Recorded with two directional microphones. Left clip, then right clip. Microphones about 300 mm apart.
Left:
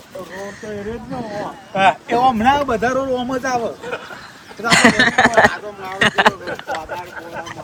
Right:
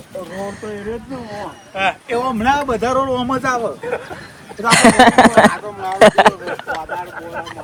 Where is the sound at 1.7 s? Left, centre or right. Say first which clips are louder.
Left 4 dB; left.